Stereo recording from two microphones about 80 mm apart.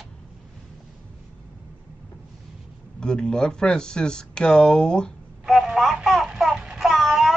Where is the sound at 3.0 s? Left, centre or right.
Centre.